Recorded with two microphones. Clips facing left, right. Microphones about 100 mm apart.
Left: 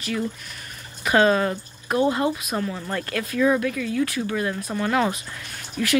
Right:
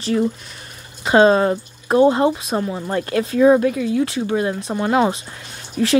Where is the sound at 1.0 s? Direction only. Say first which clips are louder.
Right 6 dB; 25° right (ahead or behind).